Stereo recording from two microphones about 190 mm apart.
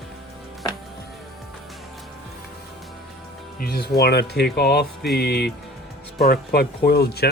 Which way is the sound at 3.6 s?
55° left (ahead or behind).